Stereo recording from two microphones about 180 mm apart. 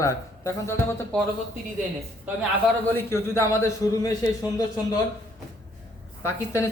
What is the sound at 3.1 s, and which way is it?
Speech, 15° left (ahead or behind).